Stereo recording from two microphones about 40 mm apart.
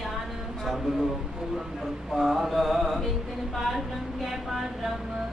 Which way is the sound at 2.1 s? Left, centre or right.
Centre.